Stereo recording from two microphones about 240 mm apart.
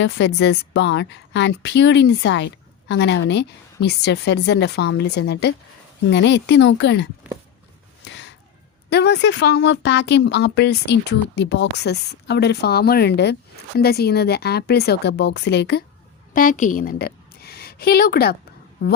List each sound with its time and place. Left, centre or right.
0.0 s a woman's voice: left
8.0 s a sound: left
8.9 s a woman's voice: left
16.3 s a woman's voice: left